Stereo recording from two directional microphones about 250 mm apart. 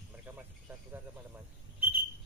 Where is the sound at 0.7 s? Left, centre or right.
Centre.